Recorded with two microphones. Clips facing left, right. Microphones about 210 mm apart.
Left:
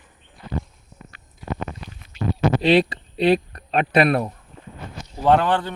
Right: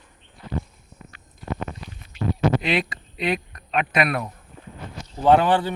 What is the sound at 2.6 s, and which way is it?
Speech, 35° left (ahead or behind).